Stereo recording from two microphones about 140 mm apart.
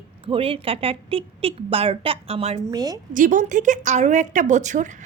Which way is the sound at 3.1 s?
65° right (ahead or behind).